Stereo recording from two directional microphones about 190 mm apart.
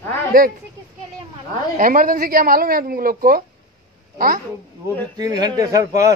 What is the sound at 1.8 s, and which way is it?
Speech, 50° right (ahead or behind).